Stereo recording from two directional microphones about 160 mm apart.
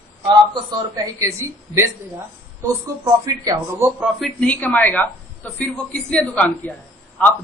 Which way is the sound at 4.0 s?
Centre (ahead or behind).